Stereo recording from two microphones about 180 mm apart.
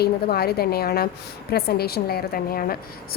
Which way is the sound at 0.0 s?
60° left (ahead or behind).